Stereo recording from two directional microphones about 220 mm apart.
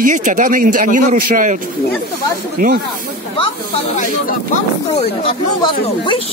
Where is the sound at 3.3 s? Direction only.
25° left (ahead or behind).